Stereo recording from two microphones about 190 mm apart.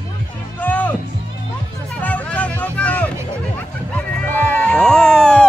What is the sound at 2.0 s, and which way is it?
Music, 10° left (ahead or behind).